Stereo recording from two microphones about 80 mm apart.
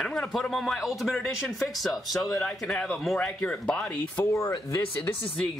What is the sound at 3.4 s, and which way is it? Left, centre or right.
Speech, centre.